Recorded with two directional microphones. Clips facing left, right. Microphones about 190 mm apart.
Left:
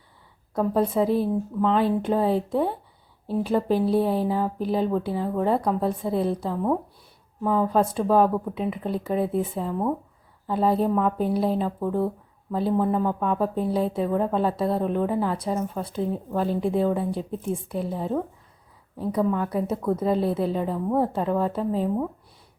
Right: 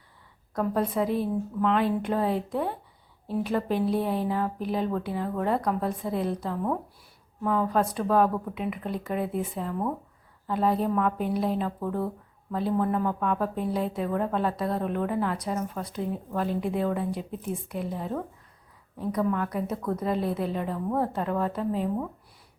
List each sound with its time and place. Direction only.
0.5 s a woman's voice: 25° left (ahead or behind)
7.8 s a woman's voice: 30° left (ahead or behind)